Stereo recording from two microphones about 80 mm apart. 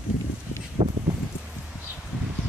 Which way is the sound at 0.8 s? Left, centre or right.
Right.